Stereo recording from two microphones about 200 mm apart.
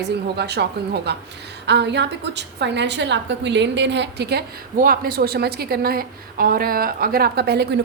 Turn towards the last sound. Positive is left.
turn(degrees=-55)  # may be behind; listen again after turning